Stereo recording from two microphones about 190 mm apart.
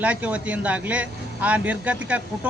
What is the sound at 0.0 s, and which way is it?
Speech, 5° right (ahead or behind).